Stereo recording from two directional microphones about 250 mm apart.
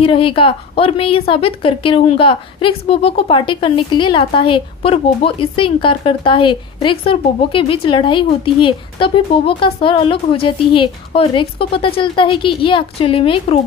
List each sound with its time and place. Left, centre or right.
0.0 s a woman's voice: left